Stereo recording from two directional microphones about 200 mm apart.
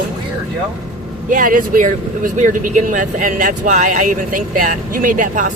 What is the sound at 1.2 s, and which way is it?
Speech, 45° right (ahead or behind).